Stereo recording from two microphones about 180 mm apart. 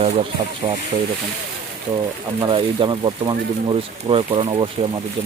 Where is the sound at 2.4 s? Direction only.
25° right (ahead or behind).